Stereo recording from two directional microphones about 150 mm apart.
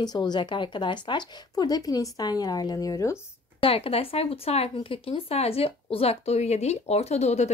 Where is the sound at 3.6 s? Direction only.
40° left (ahead or behind).